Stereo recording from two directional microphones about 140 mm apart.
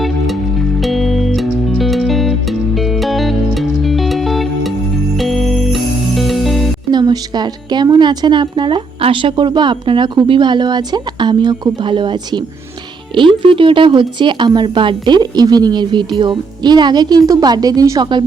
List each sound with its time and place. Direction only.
0.8 s music: centre (ahead or behind)
6.9 s a woman's voice: 30° right (ahead or behind)